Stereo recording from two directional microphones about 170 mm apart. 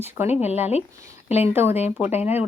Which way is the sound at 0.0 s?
15° right (ahead or behind).